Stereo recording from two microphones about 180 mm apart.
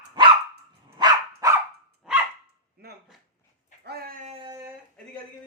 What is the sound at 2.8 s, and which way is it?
Dog, 60° right (ahead or behind).